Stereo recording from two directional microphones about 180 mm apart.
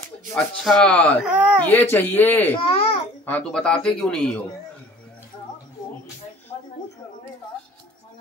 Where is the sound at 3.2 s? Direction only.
5° left (ahead or behind).